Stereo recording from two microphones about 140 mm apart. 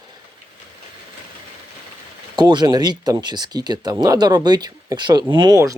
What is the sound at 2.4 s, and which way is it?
Speech, 30° right (ahead or behind).